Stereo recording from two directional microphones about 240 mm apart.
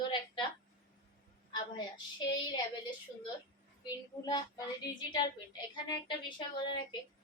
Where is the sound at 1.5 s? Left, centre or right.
Centre.